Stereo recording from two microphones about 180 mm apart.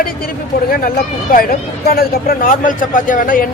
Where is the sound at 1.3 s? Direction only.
55° left (ahead or behind).